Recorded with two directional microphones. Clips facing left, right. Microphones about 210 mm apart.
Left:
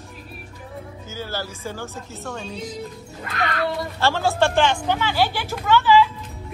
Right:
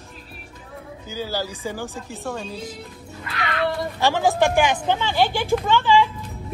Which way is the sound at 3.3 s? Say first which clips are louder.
Left 1 dB; 45° left (ahead or behind).